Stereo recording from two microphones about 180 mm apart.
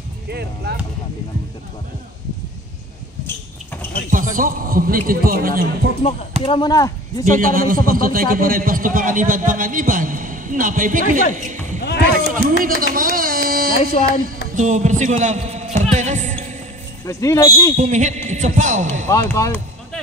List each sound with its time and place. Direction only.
0.3 s speech: 65° right (ahead or behind)
4.1 s a man's voice: 50° right (ahead or behind)
6.4 s speech: 25° left (ahead or behind)
7.2 s a man's voice: 50° right (ahead or behind)
11.3 s a sound: 45° right (ahead or behind)
11.8 s a sound: 65° left (ahead or behind)
12.4 s speech: 50° right (ahead or behind)
14.5 s music: 40° right (ahead or behind)
17.0 s speech: 15° left (ahead or behind)
17.7 s a man's voice: 40° right (ahead or behind)
19.0 s speech: 15° left (ahead or behind)